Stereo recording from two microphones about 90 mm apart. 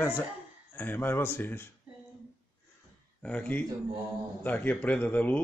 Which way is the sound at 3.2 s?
15° left (ahead or behind).